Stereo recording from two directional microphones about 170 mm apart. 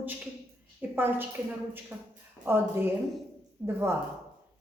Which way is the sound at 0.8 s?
10° right (ahead or behind).